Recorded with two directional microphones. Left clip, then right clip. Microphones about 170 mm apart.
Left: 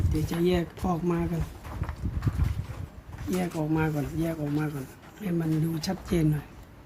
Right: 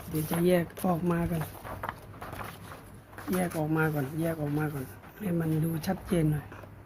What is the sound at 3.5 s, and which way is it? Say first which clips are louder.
Speech: left 1 dB; 15° right (ahead or behind).